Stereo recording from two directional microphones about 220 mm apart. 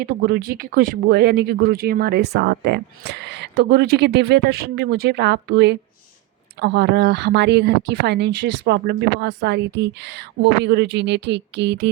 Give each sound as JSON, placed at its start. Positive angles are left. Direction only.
{"t": 0.0, "sound": "speech", "side_deg": -45}